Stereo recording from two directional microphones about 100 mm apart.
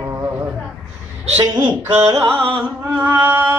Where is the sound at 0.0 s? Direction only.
20° right (ahead or behind).